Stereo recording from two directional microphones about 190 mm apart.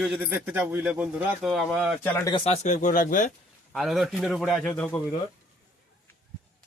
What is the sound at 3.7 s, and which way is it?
Speech, centre (ahead or behind).